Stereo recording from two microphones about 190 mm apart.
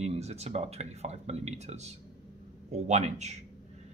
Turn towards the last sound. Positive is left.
turn(degrees=-35)  # may be behind; listen again after turning